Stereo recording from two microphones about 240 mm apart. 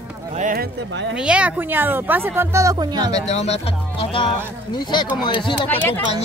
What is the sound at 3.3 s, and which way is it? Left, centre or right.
Speech, left.